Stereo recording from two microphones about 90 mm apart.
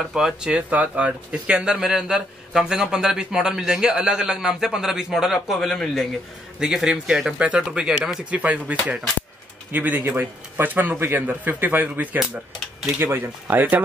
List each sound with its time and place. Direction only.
0.1 s speech: 10° right (ahead or behind)
6.6 s speech: 5° right (ahead or behind)